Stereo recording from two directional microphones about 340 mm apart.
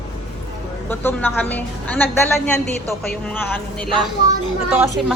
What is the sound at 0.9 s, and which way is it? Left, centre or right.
A woman's voice, centre.